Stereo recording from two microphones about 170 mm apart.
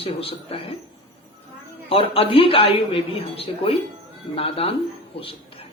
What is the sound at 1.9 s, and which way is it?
Speech, 35° left (ahead or behind).